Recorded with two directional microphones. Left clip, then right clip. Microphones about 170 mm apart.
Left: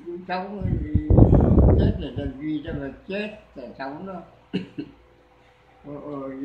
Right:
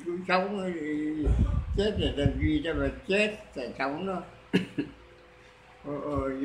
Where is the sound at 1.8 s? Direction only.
10° left (ahead or behind).